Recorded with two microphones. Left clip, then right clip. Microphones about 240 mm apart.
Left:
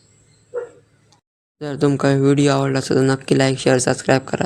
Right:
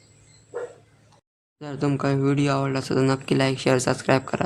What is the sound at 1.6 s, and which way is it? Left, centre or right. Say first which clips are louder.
Speech: left 8 dB; left.